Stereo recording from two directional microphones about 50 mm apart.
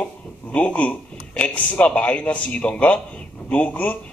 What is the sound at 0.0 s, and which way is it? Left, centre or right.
A man's voice, left.